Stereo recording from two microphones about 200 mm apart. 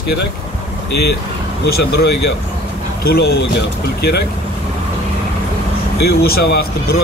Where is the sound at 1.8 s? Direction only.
55° left (ahead or behind).